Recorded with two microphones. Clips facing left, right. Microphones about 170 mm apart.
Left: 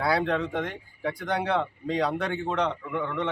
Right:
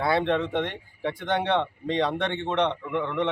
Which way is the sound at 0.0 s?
25° right (ahead or behind).